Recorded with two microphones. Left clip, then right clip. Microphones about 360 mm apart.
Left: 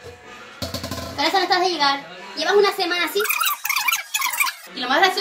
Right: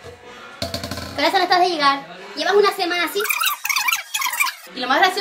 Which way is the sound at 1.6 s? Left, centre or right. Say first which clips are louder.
Right 3 dB; centre.